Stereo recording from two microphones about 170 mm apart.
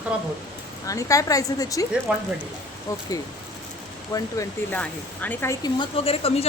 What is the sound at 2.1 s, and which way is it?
Speech, 10° right (ahead or behind).